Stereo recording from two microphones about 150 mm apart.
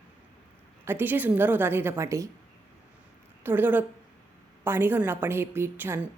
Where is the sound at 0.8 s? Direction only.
15° right (ahead or behind).